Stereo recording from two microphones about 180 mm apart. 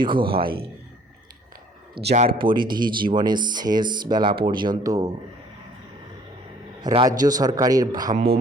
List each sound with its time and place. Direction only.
0.0 s speech: 25° right (ahead or behind)
2.1 s speech: 30° right (ahead or behind)
6.8 s speech: 25° right (ahead or behind)